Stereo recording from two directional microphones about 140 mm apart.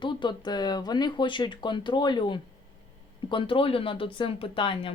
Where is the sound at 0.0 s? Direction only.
35° left (ahead or behind).